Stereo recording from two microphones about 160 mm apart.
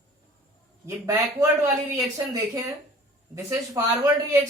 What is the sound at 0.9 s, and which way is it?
A man's voice, 20° right (ahead or behind).